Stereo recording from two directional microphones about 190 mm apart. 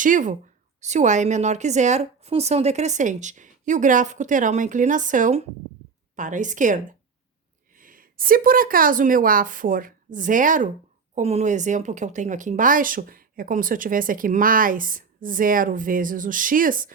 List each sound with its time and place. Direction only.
0.0 s a woman's voice: 45° right (ahead or behind)
7.8 s speech: 45° right (ahead or behind)